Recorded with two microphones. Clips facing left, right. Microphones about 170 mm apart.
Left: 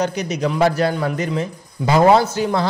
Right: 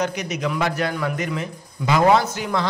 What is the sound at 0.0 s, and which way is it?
A man's voice, 30° left (ahead or behind).